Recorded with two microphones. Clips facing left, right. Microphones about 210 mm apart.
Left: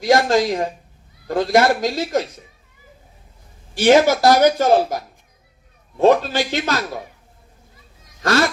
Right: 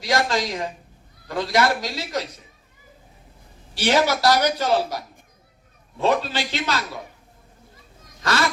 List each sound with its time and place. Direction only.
0.0 s speech: 50° left (ahead or behind)
3.8 s speech: 50° left (ahead or behind)
8.2 s speech: 50° left (ahead or behind)